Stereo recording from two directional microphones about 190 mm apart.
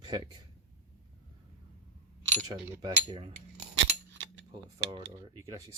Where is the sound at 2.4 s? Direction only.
25° right (ahead or behind).